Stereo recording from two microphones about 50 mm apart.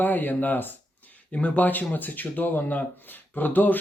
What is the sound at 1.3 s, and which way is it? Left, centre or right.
Speech, left.